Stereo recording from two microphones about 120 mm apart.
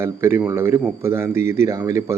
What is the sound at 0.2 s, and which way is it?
Speech, 20° right (ahead or behind).